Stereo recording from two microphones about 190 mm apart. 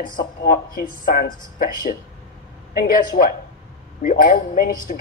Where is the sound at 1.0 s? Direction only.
50° left (ahead or behind).